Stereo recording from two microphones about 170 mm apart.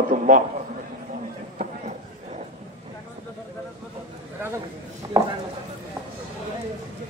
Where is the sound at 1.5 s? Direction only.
45° right (ahead or behind).